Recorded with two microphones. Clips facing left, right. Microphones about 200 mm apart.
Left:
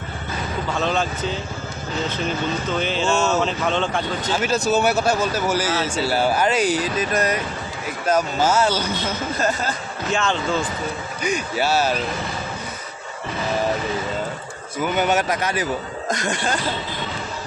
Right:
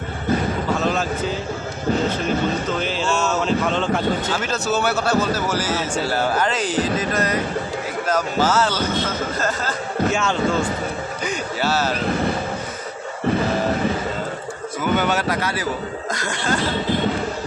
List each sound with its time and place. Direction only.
0.8 s speech: 5° right (ahead or behind)
2.7 s speech: 5° right (ahead or behind)
4.7 s speech: 15° left (ahead or behind)
10.1 s speech: 10° right (ahead or behind)
11.2 s speech: 15° left (ahead or behind)
14.9 s speech: 15° left (ahead or behind)